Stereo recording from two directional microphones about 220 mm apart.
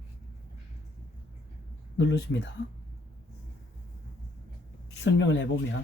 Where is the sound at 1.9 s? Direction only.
55° left (ahead or behind).